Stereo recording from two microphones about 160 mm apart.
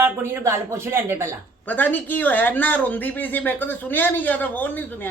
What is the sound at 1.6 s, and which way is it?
Speech, 10° left (ahead or behind).